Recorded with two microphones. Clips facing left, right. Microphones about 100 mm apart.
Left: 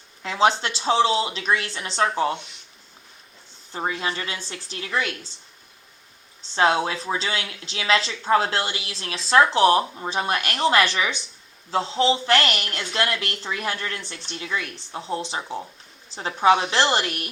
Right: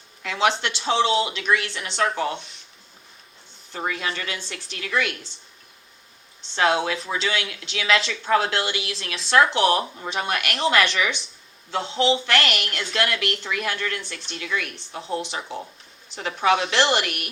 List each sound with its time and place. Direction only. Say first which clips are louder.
0.2 s speech: left 2 dB; 30° left (ahead or behind)
3.7 s speech: left 1 dB; 25° left (ahead or behind)
6.6 s speech: left 1 dB; 30° left (ahead or behind)